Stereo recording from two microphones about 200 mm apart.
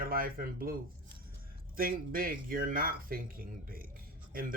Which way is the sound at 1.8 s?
45° right (ahead or behind).